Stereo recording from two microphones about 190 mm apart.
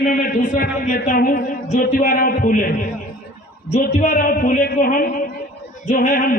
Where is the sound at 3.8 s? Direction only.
50° left (ahead or behind).